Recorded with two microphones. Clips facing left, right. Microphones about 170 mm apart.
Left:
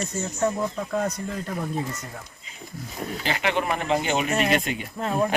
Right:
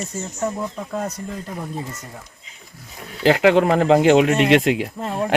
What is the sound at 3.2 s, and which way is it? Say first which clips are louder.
A man's voice: right 12 dB; 90° right.